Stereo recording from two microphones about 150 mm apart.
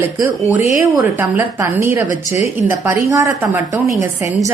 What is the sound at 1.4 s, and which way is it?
A woman's voice, 20° right (ahead or behind).